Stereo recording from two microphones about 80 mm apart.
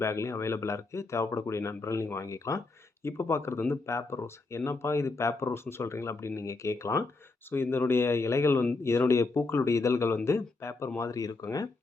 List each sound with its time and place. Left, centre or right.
0.0 s speech: left
7.5 s speech: left